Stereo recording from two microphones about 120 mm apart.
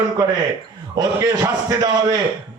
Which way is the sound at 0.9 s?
35° right (ahead or behind).